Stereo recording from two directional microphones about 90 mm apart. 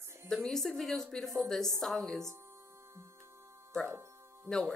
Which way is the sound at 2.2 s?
30° right (ahead or behind).